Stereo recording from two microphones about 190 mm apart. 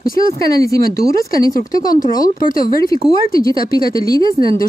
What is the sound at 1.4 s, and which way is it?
Speech, 45° left (ahead or behind).